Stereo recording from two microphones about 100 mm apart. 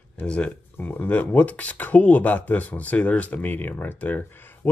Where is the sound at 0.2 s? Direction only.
15° left (ahead or behind).